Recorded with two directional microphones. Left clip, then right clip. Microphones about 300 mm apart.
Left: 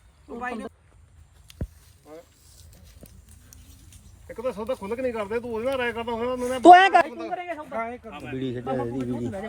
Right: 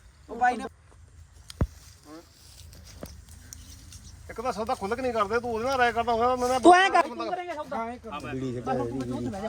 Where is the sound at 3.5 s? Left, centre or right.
Right.